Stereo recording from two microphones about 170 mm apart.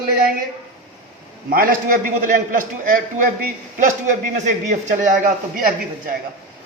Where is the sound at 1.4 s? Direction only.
55° right (ahead or behind).